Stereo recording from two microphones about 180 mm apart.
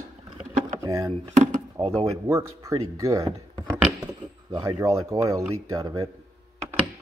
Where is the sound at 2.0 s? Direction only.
20° right (ahead or behind).